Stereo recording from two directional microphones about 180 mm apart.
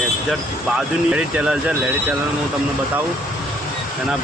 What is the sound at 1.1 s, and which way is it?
Speech, 5° right (ahead or behind).